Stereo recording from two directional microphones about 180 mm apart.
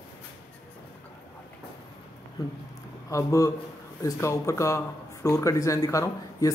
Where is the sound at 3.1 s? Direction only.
20° left (ahead or behind).